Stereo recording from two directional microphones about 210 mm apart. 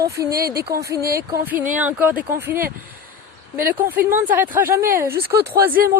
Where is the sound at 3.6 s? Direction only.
10° right (ahead or behind).